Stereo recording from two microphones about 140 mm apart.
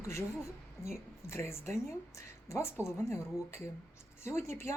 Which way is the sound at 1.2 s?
20° left (ahead or behind).